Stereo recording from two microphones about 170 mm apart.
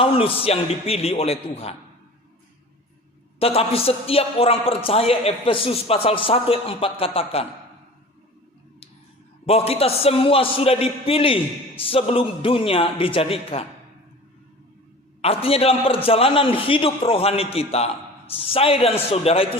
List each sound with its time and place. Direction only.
0.0 s a man's voice: 35° left (ahead or behind)
3.3 s a man's voice: 35° left (ahead or behind)
9.5 s a man's voice: 35° left (ahead or behind)
15.2 s a man's voice: 35° left (ahead or behind)